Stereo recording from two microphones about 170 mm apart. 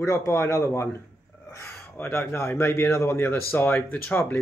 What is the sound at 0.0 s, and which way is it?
Speech, 20° left (ahead or behind).